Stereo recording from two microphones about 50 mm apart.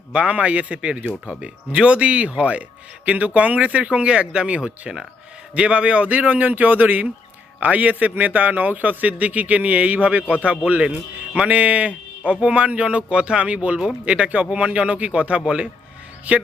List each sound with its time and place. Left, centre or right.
0.1 s a man's voice: right
10.8 s speech: centre
11.4 s a man's voice: right